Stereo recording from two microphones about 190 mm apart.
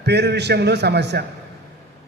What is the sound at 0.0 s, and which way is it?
A man's voice, 60° right (ahead or behind).